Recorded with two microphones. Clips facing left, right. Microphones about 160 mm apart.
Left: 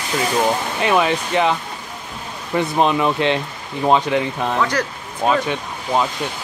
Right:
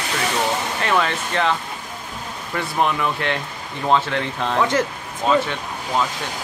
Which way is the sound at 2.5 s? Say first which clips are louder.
Left 4 dB; 20° left (ahead or behind).